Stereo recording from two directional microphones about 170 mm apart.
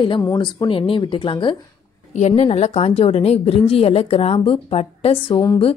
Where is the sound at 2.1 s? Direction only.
40° left (ahead or behind).